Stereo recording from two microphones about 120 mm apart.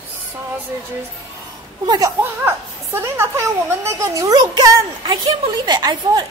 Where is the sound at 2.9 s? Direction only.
20° right (ahead or behind).